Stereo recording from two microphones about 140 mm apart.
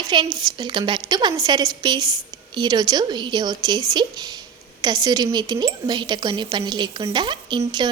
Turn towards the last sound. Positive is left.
turn(degrees=-30)  # may be behind; listen again after turning